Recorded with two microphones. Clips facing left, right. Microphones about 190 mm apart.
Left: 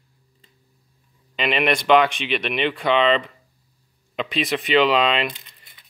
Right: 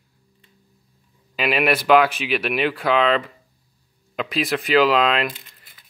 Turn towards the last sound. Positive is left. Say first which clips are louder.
# right 3 dB
turn(degrees=-5)  # may be behind; listen again after turning